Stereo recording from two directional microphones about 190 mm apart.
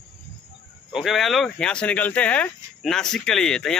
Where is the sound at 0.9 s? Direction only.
Centre (ahead or behind).